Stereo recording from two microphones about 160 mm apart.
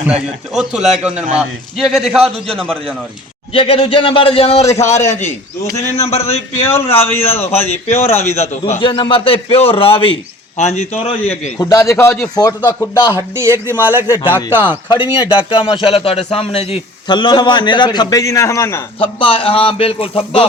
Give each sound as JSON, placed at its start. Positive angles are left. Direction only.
{"t": 0.1, "sound": "a man's voice", "side_deg": -5}
{"t": 3.5, "sound": "a man's voice", "side_deg": 35}
{"t": 4.9, "sound": "a man's voice", "side_deg": 15}
{"t": 5.7, "sound": "a man's voice", "side_deg": 40}
{"t": 6.7, "sound": "a man's voice", "side_deg": 15}
{"t": 7.5, "sound": "a man's voice", "side_deg": 40}
{"t": 8.1, "sound": "a man's voice", "side_deg": 15}
{"t": 8.8, "sound": "a man's voice", "side_deg": 30}
{"t": 11.6, "sound": "a man's voice", "side_deg": 20}
{"t": 13.3, "sound": "speech", "side_deg": -15}
{"t": 14.8, "sound": "a man's voice", "side_deg": 30}
{"t": 19.2, "sound": "a man's voice", "side_deg": 35}